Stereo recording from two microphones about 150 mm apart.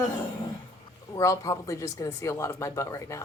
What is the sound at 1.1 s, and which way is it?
Speech, 20° left (ahead or behind).